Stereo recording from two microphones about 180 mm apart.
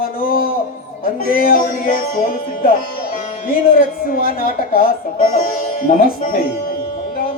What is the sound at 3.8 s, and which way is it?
A woman's voice, 50° left (ahead or behind).